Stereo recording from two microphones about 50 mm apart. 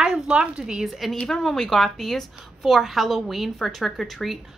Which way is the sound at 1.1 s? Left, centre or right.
Centre.